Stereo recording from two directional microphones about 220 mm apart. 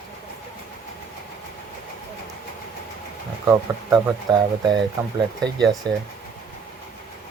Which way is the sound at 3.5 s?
15° right (ahead or behind).